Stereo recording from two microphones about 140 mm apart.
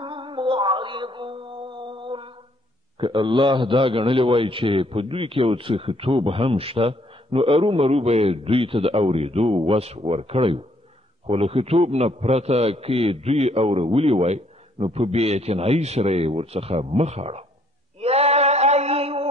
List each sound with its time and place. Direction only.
0.0 s mantra: 35° right (ahead or behind)
3.0 s a man's voice: 35° right (ahead or behind)
18.0 s a sound: 45° right (ahead or behind)